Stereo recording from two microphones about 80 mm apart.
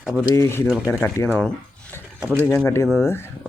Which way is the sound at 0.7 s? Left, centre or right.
Centre.